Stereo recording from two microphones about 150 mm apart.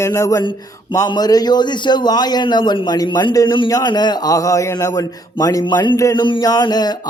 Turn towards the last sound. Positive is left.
turn(degrees=25)  # may be behind; listen again after turning